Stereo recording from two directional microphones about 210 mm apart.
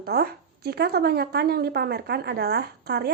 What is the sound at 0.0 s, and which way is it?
Speech, 50° right (ahead or behind).